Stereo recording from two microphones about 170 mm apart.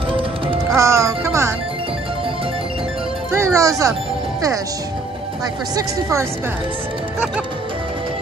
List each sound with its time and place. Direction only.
0.7 s speech: 15° right (ahead or behind)
3.3 s speech: 15° right (ahead or behind)
5.8 s speech: 15° right (ahead or behind)